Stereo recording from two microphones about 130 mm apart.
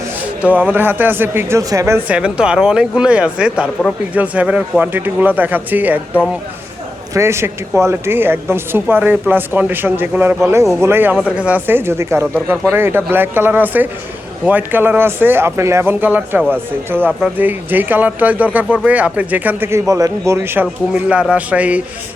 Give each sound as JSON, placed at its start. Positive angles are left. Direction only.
{"t": 0.4, "sound": "a woman's voice", "side_deg": -10}
{"t": 2.0, "sound": "a woman's voice", "side_deg": -10}
{"t": 7.1, "sound": "a woman's voice", "side_deg": -20}
{"t": 17.1, "sound": "speech", "side_deg": 0}
{"t": 17.3, "sound": "a woman's voice", "side_deg": -15}